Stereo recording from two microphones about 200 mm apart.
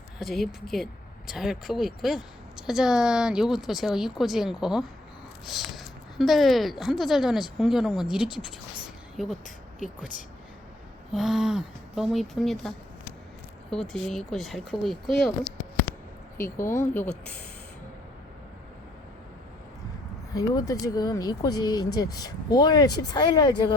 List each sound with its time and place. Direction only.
0.2 s speech: centre (ahead or behind)
11.1 s speech: centre (ahead or behind)
16.4 s speech: 15° left (ahead or behind)
20.3 s speech: 15° left (ahead or behind)